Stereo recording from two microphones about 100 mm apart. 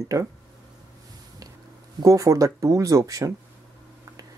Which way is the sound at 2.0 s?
35° right (ahead or behind).